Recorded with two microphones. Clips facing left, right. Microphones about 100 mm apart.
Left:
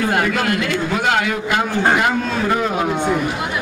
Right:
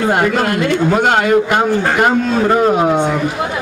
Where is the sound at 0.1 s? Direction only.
40° right (ahead or behind).